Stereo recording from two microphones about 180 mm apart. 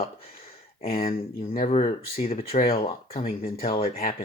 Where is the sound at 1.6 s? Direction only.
35° left (ahead or behind).